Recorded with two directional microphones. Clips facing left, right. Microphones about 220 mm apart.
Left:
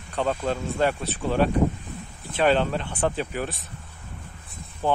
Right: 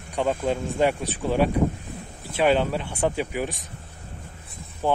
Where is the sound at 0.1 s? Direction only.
10° right (ahead or behind).